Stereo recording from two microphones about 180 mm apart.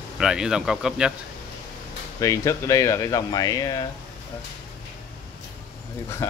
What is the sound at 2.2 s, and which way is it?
Speech, 15° left (ahead or behind).